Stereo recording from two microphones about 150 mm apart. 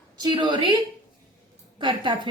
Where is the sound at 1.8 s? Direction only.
30° right (ahead or behind).